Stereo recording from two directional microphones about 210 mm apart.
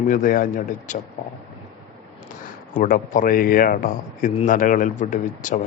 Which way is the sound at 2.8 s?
40° left (ahead or behind).